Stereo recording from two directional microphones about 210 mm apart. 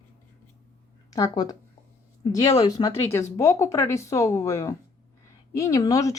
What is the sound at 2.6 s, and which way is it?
Speech, 15° left (ahead or behind).